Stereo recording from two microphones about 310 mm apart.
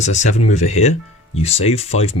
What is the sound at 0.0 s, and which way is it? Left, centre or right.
Speech, left.